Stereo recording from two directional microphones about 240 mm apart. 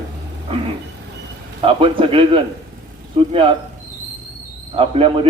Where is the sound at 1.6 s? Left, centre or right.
Right.